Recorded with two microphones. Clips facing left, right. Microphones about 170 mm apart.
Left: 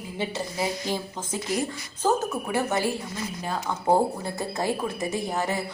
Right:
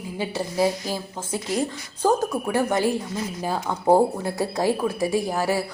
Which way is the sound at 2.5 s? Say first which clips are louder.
Right 4 dB; 15° right (ahead or behind).